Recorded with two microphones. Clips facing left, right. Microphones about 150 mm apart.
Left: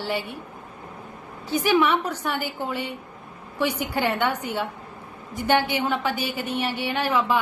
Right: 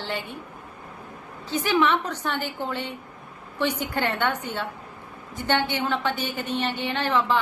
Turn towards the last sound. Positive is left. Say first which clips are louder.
# left 1 dB
turn(degrees=10)  # may be behind; listen again after turning